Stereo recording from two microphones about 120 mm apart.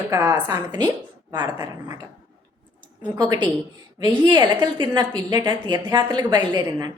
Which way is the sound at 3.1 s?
35° right (ahead or behind).